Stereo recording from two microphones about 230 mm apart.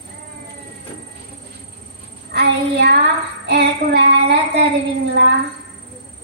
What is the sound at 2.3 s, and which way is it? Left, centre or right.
Speech, right.